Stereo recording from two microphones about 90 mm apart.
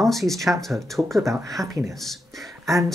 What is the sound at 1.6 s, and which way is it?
Speech, 40° right (ahead or behind).